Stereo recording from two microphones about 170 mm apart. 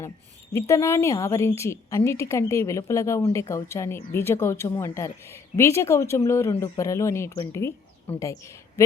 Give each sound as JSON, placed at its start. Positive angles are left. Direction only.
{"t": 0.5, "sound": "speech", "side_deg": 15}